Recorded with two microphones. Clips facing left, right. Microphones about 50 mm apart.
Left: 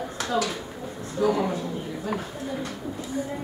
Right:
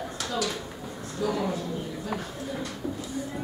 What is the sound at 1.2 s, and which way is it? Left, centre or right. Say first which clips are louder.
Speech: left 5 dB; centre.